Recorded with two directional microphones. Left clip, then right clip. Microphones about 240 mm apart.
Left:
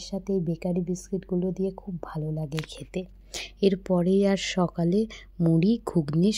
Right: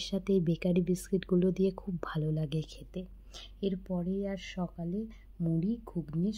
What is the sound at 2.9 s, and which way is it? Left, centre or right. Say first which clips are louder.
Speech: left 10 dB; left.